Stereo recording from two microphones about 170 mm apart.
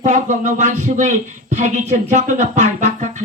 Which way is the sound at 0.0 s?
45° right (ahead or behind).